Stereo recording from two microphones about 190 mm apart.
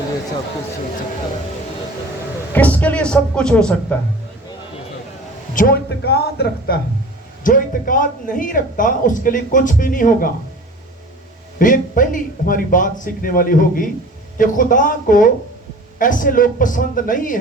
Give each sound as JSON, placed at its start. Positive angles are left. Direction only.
{"t": 2.5, "sound": "speech", "side_deg": 10}
{"t": 5.5, "sound": "speech", "side_deg": 55}
{"t": 7.4, "sound": "a woman's voice", "side_deg": 45}
{"t": 11.6, "sound": "a woman's voice", "side_deg": 45}